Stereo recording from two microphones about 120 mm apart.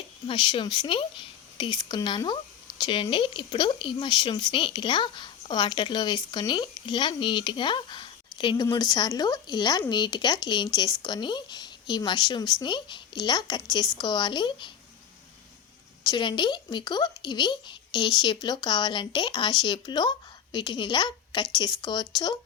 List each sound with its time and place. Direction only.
0.3 s speech: 45° left (ahead or behind)
16.0 s speech: 40° left (ahead or behind)